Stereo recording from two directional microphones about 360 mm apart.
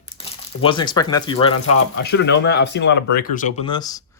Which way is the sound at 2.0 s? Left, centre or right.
Left.